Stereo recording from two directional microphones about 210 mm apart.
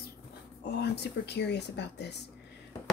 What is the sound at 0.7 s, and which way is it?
Speech, 50° left (ahead or behind).